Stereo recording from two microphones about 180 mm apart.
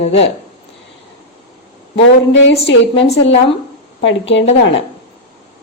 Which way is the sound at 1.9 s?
90° left.